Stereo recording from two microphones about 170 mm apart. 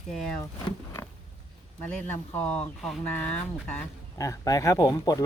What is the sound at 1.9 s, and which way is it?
Speech, 10° left (ahead or behind).